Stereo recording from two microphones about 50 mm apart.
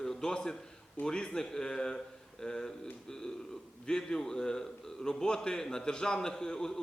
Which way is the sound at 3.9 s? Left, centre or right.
Centre.